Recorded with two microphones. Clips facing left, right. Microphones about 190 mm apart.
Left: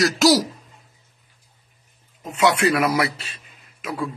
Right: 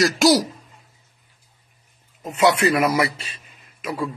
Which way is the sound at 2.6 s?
45° right (ahead or behind).